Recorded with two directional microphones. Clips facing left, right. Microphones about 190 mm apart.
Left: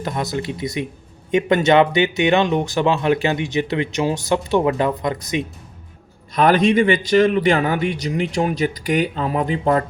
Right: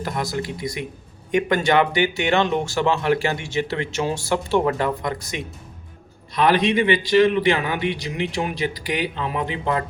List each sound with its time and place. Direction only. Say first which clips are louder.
0.0 s speech: left 2 dB; 20° left (ahead or behind)
6.3 s a man's voice: left 3 dB; 45° left (ahead or behind)